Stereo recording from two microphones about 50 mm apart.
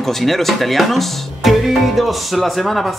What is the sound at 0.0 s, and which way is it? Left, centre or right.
Speech, centre.